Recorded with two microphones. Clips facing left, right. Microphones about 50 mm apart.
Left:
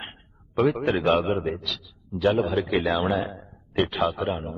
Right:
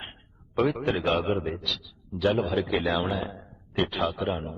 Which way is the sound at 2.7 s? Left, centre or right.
Centre.